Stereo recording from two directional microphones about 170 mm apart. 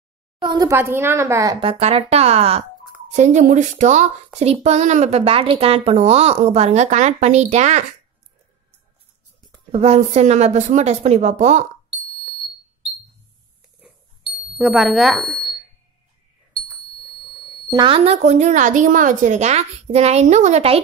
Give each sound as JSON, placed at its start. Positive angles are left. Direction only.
{"t": 0.4, "sound": "a woman's voice", "side_deg": -25}
{"t": 1.6, "sound": "speech", "side_deg": -35}
{"t": 9.7, "sound": "speech", "side_deg": -35}
{"t": 14.6, "sound": "speech", "side_deg": 0}
{"t": 17.6, "sound": "speech", "side_deg": -30}